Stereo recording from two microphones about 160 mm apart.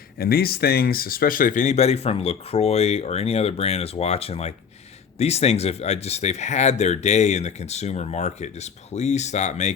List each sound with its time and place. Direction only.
0.2 s speech: 70° left (ahead or behind); by 9.7 s 45° left (ahead or behind)